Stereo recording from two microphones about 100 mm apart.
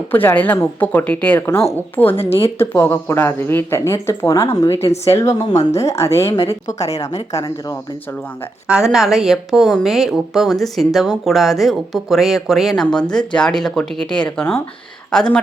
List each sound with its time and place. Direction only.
0.1 s speech: 20° left (ahead or behind)
4.7 s speech: 75° left (ahead or behind)
5.0 s speech: 30° left (ahead or behind)
8.6 s a woman's voice: 10° right (ahead or behind)